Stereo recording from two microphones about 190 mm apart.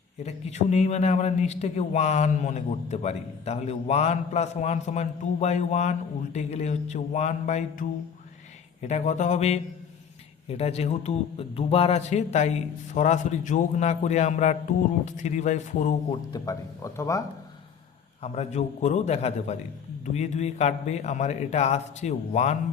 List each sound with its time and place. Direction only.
0.2 s a man's voice: 35° left (ahead or behind)
10.6 s a man's voice: 35° left (ahead or behind)
16.3 s speech: 15° left (ahead or behind)
18.2 s a man's voice: 35° left (ahead or behind)